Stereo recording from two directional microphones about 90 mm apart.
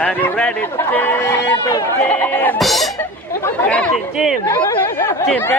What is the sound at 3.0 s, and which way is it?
Speech, 15° left (ahead or behind).